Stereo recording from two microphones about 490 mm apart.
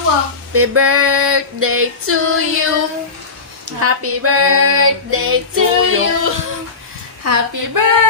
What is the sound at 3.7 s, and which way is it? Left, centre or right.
Female singing, right.